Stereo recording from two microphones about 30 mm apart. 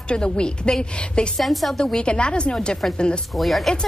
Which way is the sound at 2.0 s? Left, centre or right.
Left.